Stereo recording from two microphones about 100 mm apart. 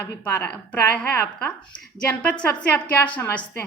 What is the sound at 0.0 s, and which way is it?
A woman's voice, 20° left (ahead or behind).